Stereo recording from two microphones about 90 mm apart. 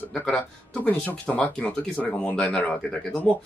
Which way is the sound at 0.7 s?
20° left (ahead or behind).